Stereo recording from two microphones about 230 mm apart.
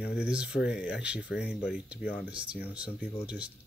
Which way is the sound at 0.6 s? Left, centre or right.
Left.